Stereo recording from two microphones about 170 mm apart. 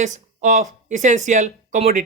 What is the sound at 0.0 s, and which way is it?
Speech, 45° right (ahead or behind).